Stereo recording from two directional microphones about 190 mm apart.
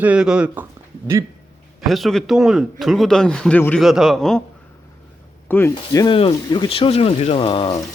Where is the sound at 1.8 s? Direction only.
Centre (ahead or behind).